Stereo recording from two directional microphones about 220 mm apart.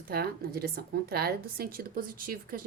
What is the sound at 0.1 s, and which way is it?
A woman's voice, 45° right (ahead or behind).